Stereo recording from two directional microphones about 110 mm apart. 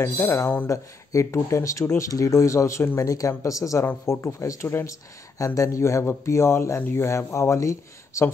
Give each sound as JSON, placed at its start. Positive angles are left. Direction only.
{"t": 0.0, "sound": "speech", "side_deg": 25}